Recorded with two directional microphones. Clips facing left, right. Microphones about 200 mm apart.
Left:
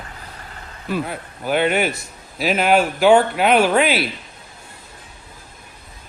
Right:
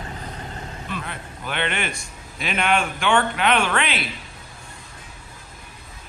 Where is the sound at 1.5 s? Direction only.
5° left (ahead or behind).